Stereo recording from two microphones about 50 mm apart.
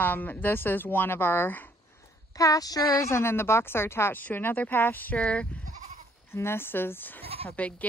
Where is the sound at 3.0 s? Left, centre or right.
Left.